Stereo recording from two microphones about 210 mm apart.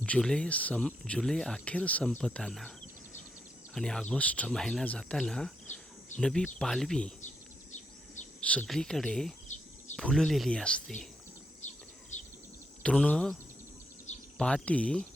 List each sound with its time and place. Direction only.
0.0 s speech: 5° left (ahead or behind)
3.8 s speech: 5° left (ahead or behind)
7.7 s bird: 35° left (ahead or behind)
8.4 s speech: 5° left (ahead or behind)
12.1 s bird: 35° left (ahead or behind)
12.8 s speech: 5° left (ahead or behind)
14.3 s speech: 5° left (ahead or behind)